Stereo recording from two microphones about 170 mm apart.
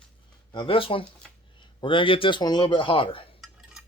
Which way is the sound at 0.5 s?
30° left (ahead or behind).